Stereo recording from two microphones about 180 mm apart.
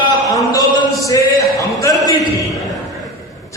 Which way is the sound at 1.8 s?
20° left (ahead or behind).